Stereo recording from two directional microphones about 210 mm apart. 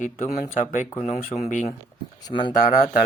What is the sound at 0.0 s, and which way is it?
Speech, 40° left (ahead or behind).